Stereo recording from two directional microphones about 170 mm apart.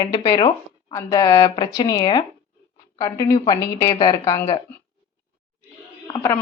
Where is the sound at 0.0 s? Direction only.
30° left (ahead or behind).